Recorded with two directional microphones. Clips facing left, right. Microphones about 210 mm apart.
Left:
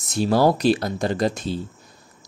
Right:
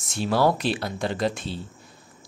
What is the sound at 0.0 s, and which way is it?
Speech, 40° left (ahead or behind).